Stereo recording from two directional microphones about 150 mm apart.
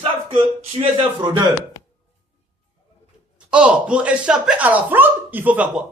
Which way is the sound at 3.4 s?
5° right (ahead or behind).